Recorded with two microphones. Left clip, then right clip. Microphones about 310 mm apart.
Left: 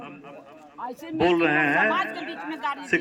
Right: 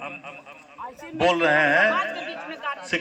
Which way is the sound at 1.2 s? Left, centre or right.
Centre.